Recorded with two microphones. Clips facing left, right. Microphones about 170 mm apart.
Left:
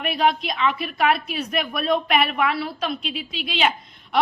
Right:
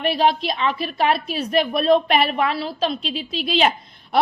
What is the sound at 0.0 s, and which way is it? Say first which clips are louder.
A woman's voice: right 3 dB; 30° right (ahead or behind).